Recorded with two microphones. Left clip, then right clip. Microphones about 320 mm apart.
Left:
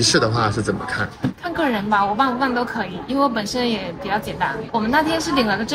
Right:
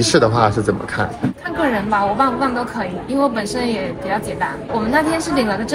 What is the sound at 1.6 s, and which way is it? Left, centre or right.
A woman's voice, left.